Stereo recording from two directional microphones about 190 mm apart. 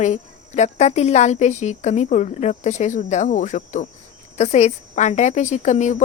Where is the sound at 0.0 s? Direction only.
35° left (ahead or behind).